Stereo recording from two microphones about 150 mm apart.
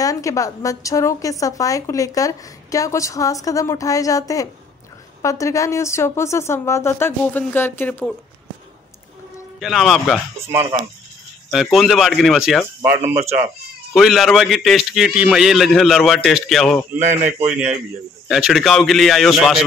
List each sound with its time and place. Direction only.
0.0 s a woman's voice: 20° left (ahead or behind)
9.6 s a man's voice: centre (ahead or behind)
11.5 s a man's voice: centre (ahead or behind)
12.8 s speech: 15° right (ahead or behind)
13.9 s a man's voice: centre (ahead or behind)